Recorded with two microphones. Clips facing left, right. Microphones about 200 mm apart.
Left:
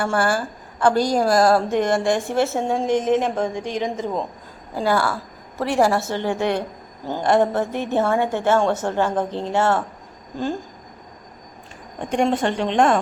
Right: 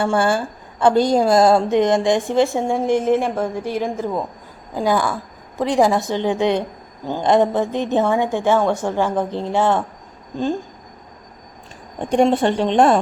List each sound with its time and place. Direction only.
0.0 s a woman's voice: 20° right (ahead or behind)
12.0 s a woman's voice: 35° right (ahead or behind)